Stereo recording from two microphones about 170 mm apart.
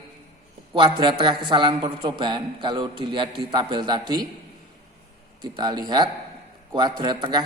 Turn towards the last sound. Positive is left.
turn(degrees=-25)  # may be behind; listen again after turning